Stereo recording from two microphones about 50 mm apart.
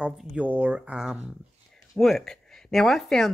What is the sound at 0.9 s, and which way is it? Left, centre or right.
Speech, centre.